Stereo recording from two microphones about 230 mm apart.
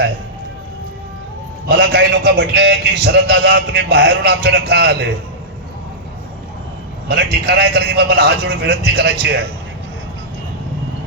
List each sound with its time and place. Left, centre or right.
1.6 s a man's voice: right
7.1 s a man's voice: right